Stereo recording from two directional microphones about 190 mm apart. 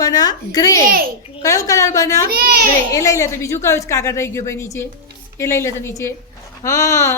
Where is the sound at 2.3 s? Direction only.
55° right (ahead or behind).